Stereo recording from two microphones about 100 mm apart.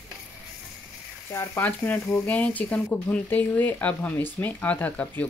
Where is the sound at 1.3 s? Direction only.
30° left (ahead or behind).